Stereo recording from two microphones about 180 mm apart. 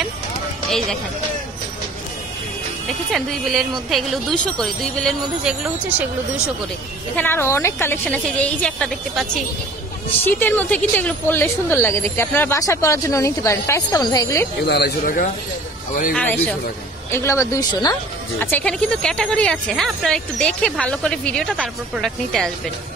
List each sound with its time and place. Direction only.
3.1 s speech: centre (ahead or behind)
7.2 s a woman's voice: 10° left (ahead or behind)
10.2 s a woman's voice: 10° left (ahead or behind)
14.7 s speech: 65° left (ahead or behind)
16.2 s a woman's voice: 10° left (ahead or behind)
18.4 s speech: 10° left (ahead or behind)